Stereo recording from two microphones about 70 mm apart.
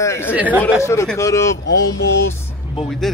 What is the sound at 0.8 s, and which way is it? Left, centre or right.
Speech, left.